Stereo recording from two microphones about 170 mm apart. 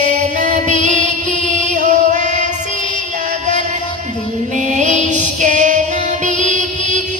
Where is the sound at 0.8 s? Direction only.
45° right (ahead or behind).